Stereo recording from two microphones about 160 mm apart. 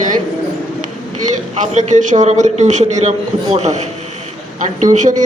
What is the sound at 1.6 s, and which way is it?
A man's voice, 50° right (ahead or behind).